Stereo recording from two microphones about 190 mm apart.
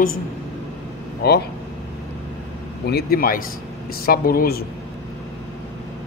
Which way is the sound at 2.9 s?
55° left (ahead or behind).